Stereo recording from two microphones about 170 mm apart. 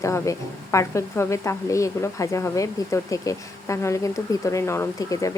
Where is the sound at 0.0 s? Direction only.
15° left (ahead or behind).